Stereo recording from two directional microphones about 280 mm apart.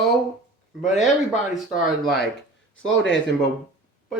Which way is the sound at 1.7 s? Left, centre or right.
Left.